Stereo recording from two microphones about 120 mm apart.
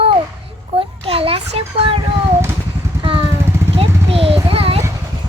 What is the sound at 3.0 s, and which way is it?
Vehicle, 45° right (ahead or behind).